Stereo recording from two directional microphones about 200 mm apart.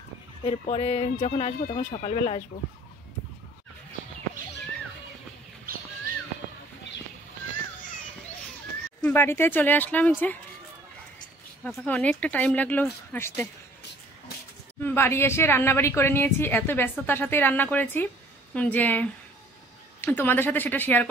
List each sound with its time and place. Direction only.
0.4 s speech: 30° left (ahead or behind)
9.0 s a woman's voice: 10° left (ahead or behind)
11.6 s a woman's voice: 5° left (ahead or behind)
14.8 s a woman's voice: 10° left (ahead or behind)